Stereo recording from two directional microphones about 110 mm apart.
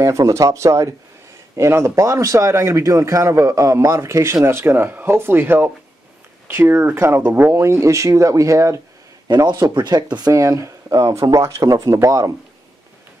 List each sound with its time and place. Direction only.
0.0 s speech: 30° right (ahead or behind)